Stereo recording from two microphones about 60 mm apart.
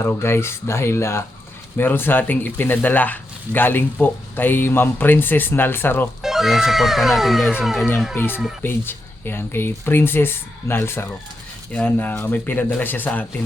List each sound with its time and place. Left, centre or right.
0.0 s speech: left
1.7 s speech: left
6.2 s speech: centre
8.1 s speech: left